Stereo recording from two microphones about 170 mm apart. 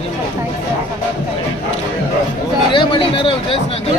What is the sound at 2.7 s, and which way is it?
Speech, 30° left (ahead or behind).